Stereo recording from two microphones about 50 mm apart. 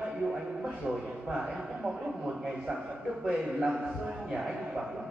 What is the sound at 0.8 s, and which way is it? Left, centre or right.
A man's voice, centre.